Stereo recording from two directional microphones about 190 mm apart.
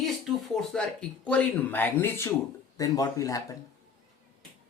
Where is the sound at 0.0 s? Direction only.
Centre (ahead or behind); by 3.4 s 20° left (ahead or behind).